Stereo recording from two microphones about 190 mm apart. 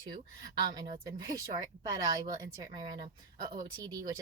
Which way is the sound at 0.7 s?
25° right (ahead or behind).